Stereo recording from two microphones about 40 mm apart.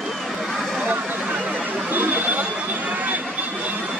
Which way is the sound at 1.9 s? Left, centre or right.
Right.